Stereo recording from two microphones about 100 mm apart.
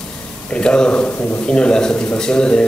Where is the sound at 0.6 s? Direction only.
10° left (ahead or behind).